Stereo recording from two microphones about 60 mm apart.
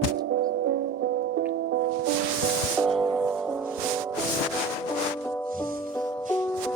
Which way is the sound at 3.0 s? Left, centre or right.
Centre.